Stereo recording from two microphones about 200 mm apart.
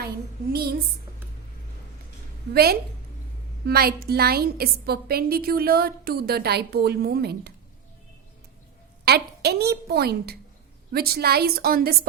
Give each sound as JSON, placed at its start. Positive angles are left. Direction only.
{"t": 0.5, "sound": "a woman's voice", "side_deg": -50}
{"t": 2.5, "sound": "a woman's voice", "side_deg": -50}
{"t": 9.0, "sound": "a woman's voice", "side_deg": -55}